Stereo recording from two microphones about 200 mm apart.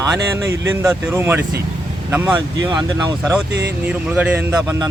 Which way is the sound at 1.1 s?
10° right (ahead or behind).